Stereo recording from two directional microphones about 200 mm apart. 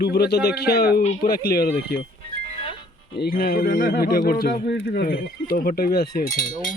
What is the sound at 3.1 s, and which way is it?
Speech, 50° left (ahead or behind).